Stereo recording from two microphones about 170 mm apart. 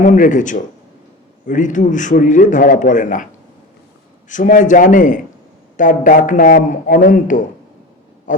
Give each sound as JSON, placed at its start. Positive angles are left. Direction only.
{"t": 0.0, "sound": "a man's voice", "side_deg": 50}
{"t": 4.3, "sound": "a man's voice", "side_deg": 50}
{"t": 8.3, "sound": "a sound", "side_deg": 50}